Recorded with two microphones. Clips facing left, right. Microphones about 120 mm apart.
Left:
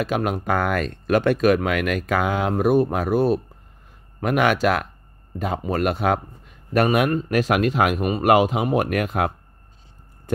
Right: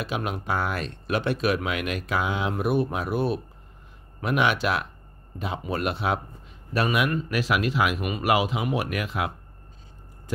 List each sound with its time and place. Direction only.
0.0 s a man's voice: 50° left (ahead or behind)